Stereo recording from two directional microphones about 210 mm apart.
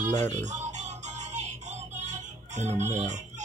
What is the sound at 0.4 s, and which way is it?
Music, 35° right (ahead or behind).